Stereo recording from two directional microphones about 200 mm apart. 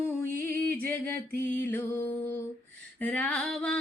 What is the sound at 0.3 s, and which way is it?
Music, 10° left (ahead or behind).